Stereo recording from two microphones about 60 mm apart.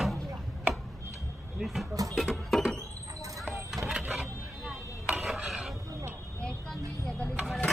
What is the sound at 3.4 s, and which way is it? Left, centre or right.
Vehicle, centre.